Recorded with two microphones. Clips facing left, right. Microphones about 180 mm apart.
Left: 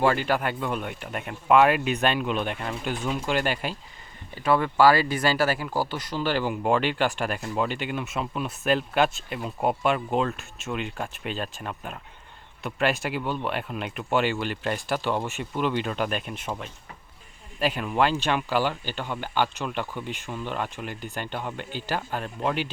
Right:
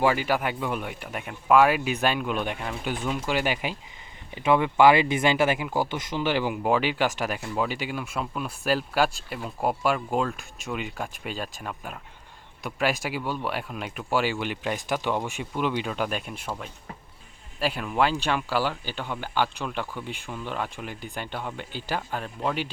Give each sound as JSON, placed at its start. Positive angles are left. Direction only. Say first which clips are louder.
{"t": 0.0, "sound": "speech", "louder": "even", "side_deg": -10}
{"t": 17.7, "sound": "speech", "louder": "even", "side_deg": -5}
{"t": 19.8, "sound": "speech", "louder": "left 1 dB", "side_deg": 15}
{"t": 20.5, "sound": "speech", "louder": "even", "side_deg": -5}